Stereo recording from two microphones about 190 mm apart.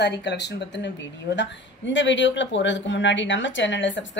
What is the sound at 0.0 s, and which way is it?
A woman's voice, 65° left (ahead or behind).